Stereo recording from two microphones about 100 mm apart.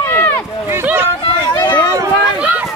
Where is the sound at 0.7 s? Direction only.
20° right (ahead or behind).